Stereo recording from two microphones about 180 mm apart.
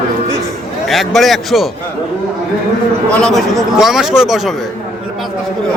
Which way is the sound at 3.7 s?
Centre (ahead or behind).